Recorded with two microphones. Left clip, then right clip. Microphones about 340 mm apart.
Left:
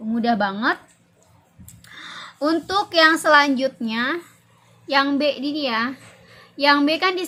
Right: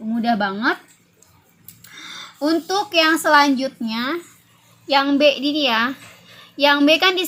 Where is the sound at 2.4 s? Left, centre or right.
Centre.